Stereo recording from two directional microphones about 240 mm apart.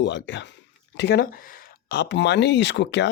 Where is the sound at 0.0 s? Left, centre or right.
Left.